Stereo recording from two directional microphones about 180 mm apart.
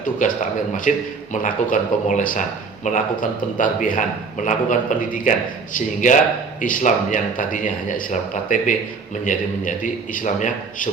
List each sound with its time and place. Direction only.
0.2 s a man's voice: 50° left (ahead or behind)